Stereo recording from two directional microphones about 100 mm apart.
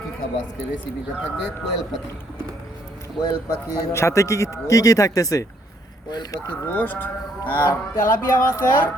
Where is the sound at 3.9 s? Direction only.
30° left (ahead or behind).